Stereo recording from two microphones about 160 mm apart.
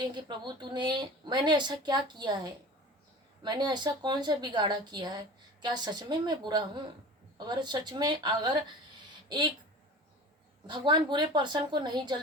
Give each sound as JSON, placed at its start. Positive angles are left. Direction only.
{"t": 0.1, "sound": "a woman's voice", "side_deg": -25}
{"t": 10.7, "sound": "a woman's voice", "side_deg": -30}